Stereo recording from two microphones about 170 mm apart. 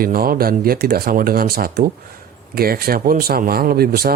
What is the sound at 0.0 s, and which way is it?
Speech, 60° right (ahead or behind).